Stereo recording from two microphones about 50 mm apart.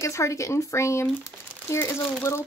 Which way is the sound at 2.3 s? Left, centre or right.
Left.